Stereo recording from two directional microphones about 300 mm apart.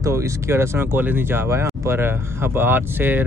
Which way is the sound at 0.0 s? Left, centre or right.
Centre.